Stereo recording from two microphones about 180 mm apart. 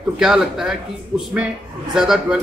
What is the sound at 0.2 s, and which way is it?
A man's voice, 5° right (ahead or behind).